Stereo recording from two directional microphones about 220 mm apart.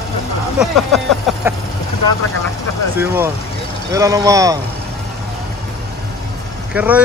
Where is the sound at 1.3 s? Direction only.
Centre (ahead or behind).